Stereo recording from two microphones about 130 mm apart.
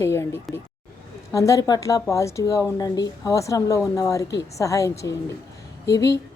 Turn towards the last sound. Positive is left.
turn(degrees=25)  # may be behind; listen again after turning